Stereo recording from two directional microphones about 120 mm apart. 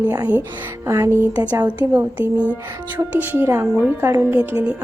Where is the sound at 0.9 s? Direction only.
25° right (ahead or behind).